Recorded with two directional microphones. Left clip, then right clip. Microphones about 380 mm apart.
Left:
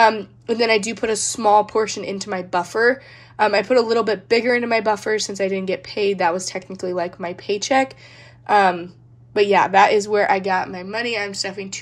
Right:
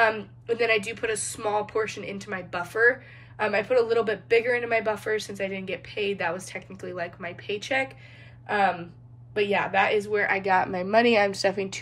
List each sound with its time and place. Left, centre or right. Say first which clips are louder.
0.0 s a woman's voice: left 8 dB; centre